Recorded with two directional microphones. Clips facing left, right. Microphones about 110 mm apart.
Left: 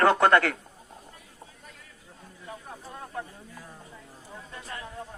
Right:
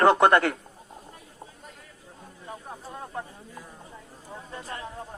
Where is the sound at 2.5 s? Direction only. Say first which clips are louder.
Right 2 dB; 25° right (ahead or behind).